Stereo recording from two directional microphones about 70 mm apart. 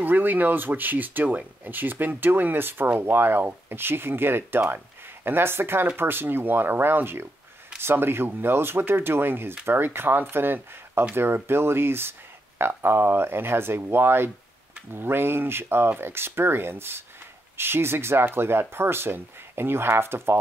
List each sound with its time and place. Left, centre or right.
0.0 s speech: right